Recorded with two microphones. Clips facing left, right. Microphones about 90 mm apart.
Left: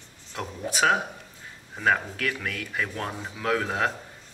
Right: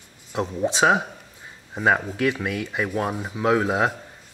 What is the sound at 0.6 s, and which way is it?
Speech, 25° right (ahead or behind).